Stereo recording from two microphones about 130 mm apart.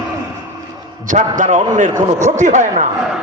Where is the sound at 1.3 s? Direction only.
75° right (ahead or behind).